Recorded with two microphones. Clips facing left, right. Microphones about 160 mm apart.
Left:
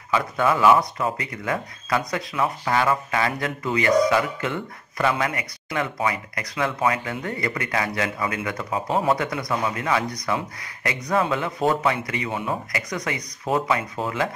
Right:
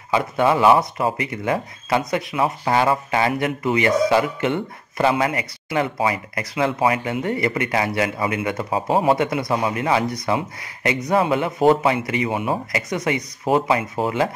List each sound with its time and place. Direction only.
0.1 s speech: 25° right (ahead or behind)